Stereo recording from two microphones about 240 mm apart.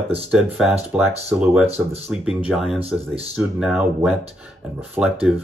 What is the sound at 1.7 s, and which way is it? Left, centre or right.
Speech, right.